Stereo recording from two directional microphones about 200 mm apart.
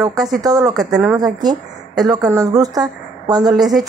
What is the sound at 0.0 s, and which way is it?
Speech, 20° right (ahead or behind).